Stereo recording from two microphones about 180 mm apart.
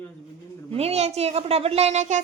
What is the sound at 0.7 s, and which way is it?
A child's voice, 35° right (ahead or behind).